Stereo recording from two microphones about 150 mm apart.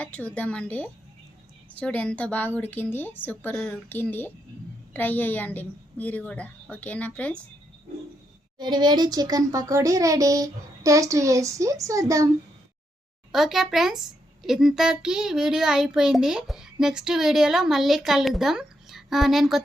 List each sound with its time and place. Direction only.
0.0 s a woman's voice: 10° left (ahead or behind)
8.5 s a child's voice: 30° right (ahead or behind)
13.3 s a child's voice: centre (ahead or behind)